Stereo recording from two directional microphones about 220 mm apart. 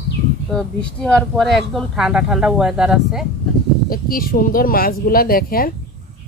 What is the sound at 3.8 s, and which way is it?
Speech, 40° left (ahead or behind).